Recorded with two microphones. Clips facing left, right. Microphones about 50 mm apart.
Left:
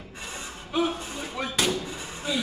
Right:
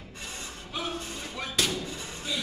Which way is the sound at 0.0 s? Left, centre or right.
Centre.